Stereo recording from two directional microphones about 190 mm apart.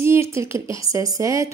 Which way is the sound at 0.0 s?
15° right (ahead or behind).